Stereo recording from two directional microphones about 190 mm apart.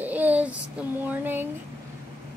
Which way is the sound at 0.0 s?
10° right (ahead or behind).